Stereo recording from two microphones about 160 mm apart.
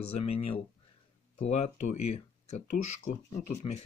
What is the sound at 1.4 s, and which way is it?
Speech, 45° left (ahead or behind).